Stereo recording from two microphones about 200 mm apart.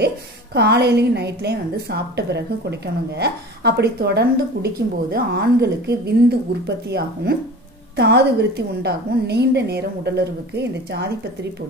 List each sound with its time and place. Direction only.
0.6 s a woman's voice: 55° right (ahead or behind)